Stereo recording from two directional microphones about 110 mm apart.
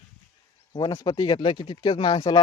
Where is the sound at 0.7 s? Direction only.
35° left (ahead or behind).